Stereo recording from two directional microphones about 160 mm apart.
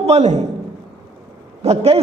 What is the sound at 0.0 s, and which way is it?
Speech, 45° right (ahead or behind).